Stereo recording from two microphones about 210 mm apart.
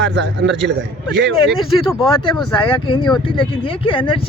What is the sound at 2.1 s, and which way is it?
Speech, 25° left (ahead or behind).